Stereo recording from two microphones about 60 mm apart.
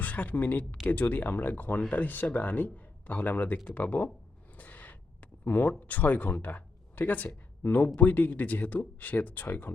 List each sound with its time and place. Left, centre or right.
0.0 s speech: left
4.5 s gasp: left
5.5 s speech: left